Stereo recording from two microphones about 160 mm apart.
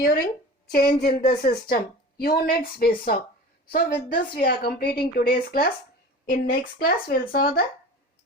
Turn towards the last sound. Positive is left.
turn(degrees=70)  # may be behind; listen again after turning